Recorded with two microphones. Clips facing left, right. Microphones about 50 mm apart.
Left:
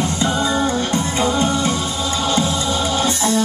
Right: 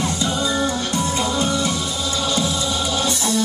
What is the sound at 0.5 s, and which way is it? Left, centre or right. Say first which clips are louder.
Music: left 3 dB; left.